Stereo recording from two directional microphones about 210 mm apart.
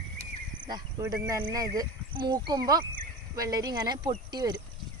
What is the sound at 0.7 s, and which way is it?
Speech, 15° right (ahead or behind).